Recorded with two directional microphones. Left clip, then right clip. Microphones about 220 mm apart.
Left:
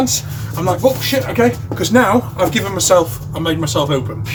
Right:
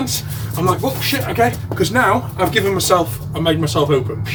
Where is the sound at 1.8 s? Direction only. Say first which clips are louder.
Left 2 dB; 20° left (ahead or behind).